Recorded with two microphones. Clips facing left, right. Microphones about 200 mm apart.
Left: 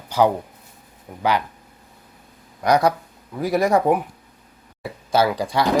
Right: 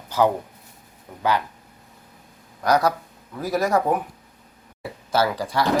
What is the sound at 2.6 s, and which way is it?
Speech, 15° left (ahead or behind).